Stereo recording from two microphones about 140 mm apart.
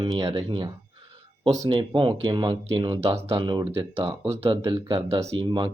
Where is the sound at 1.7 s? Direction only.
35° right (ahead or behind).